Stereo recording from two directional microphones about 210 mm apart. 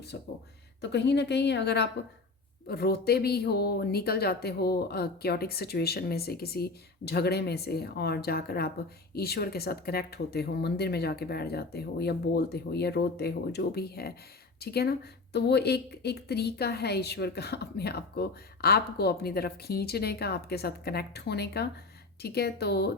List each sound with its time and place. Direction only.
0.1 s a woman's voice: 50° left (ahead or behind)